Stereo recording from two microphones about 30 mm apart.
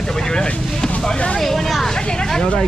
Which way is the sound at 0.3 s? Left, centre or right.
Left.